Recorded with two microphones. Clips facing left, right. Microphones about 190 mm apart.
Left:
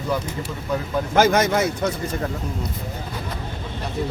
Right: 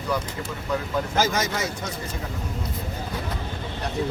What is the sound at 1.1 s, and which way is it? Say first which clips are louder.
Speech: left 9 dB; 60° left (ahead or behind).